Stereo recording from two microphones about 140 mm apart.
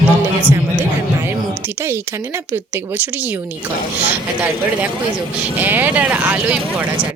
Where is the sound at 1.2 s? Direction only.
15° right (ahead or behind).